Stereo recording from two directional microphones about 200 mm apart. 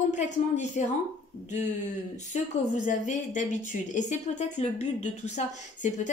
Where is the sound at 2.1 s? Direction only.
40° left (ahead or behind).